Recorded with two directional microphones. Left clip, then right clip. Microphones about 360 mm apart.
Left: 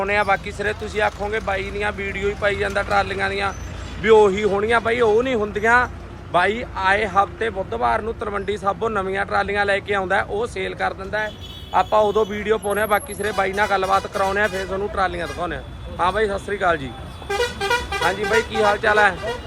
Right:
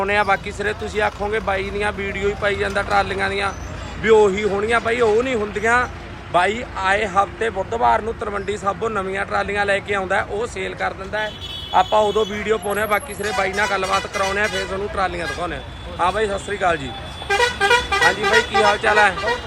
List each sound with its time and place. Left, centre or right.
0.0 s speech: centre
17.2 s vehicle: right
18.6 s speech: centre